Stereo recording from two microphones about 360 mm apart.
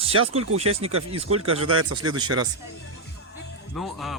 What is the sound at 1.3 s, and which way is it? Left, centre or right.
Speech, right.